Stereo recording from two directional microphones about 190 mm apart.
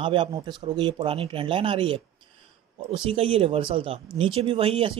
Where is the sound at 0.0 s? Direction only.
25° right (ahead or behind).